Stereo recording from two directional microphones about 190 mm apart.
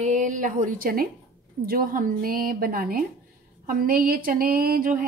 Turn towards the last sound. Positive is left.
turn(degrees=-50)  # may be behind; listen again after turning